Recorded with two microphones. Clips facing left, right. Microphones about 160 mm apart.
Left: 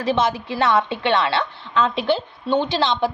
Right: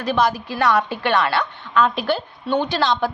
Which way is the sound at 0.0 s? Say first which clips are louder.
Even; 25° left (ahead or behind).